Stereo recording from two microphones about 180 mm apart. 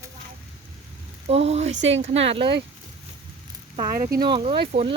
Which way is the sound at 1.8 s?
90° right.